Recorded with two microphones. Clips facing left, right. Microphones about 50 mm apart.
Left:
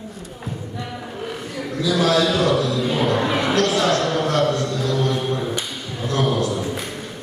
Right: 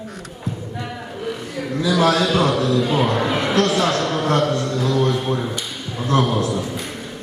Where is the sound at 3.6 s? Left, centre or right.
Right.